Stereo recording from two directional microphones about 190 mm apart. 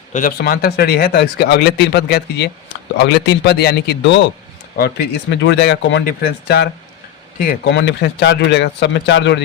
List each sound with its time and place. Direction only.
0.1 s speech: 45° left (ahead or behind); by 6.0 s 65° left (ahead or behind)
7.3 s speech: 50° left (ahead or behind)
7.7 s speech: 65° left (ahead or behind)